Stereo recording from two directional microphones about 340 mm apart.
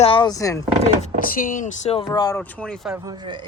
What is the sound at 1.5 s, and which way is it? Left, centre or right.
Speech, left.